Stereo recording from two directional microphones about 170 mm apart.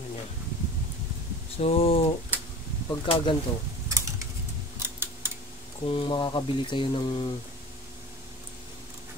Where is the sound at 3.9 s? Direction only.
20° right (ahead or behind).